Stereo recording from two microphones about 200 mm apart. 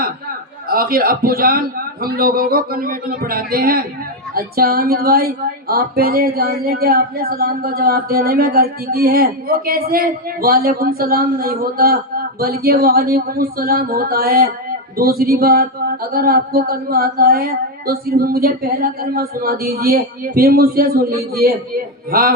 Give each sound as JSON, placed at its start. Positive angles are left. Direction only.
{"t": 0.7, "sound": "speech", "side_deg": -50}